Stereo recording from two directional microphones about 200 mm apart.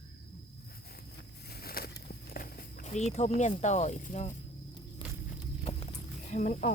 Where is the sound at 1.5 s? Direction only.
50° left (ahead or behind).